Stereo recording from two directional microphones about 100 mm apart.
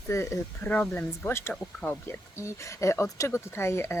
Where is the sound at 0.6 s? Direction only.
15° left (ahead or behind).